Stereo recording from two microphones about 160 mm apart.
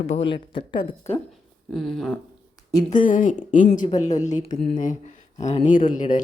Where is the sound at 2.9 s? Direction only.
55° left (ahead or behind).